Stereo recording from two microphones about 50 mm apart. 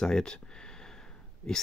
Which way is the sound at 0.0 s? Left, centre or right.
Centre.